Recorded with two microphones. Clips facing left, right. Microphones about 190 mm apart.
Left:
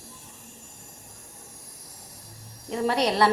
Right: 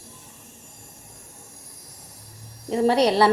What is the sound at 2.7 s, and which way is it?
Speech, 30° right (ahead or behind).